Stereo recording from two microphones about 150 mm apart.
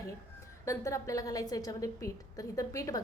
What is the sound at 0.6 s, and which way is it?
A woman's voice, 20° left (ahead or behind).